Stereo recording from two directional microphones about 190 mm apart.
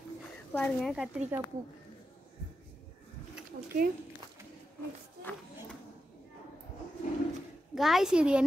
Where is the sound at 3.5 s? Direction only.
50° right (ahead or behind).